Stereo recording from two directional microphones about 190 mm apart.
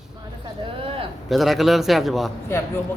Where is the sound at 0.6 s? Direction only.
30° right (ahead or behind).